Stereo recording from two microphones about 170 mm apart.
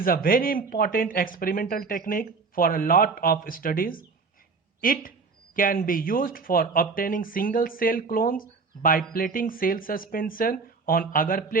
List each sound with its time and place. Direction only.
0.0 s speech: 55° left (ahead or behind)